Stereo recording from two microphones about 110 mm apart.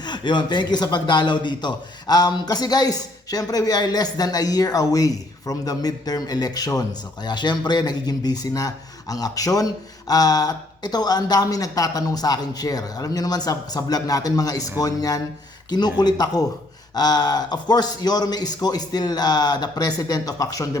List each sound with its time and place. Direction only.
0.0 s a man's voice: 45° left (ahead or behind)